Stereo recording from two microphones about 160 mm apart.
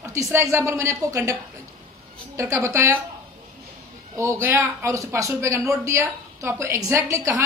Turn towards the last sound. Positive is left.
turn(degrees=-20)  # may be behind; listen again after turning